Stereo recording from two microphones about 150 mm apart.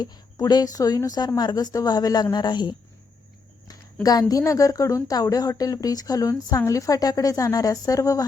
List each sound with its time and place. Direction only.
0.0 s a woman's voice: 25° left (ahead or behind)
4.0 s a woman's voice: 25° left (ahead or behind)